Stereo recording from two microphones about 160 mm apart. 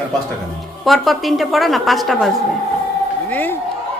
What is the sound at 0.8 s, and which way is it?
A woman's voice, centre (ahead or behind).